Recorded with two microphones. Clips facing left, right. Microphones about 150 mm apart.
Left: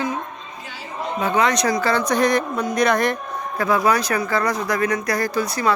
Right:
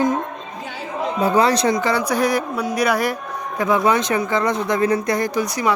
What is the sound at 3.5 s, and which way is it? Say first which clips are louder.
Speech: right 1 dB; 20° right (ahead or behind).